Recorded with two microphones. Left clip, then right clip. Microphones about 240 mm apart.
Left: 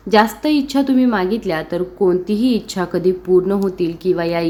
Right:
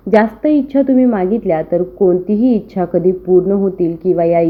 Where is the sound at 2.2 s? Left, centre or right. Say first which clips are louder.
Right 4 dB; right.